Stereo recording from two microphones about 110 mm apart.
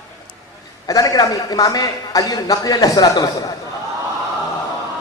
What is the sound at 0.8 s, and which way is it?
A man's voice, 30° left (ahead or behind).